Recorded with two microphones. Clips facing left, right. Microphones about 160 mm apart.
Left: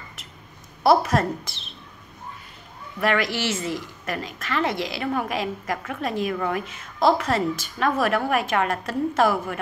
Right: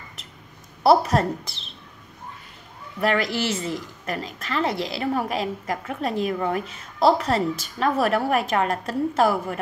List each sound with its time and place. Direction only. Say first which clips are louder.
0.8 s a woman's voice: right 1 dB; 30° right (ahead or behind)
3.0 s a woman's voice: even; 30° right (ahead or behind)